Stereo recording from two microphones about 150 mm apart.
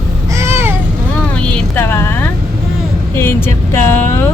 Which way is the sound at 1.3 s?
15° left (ahead or behind).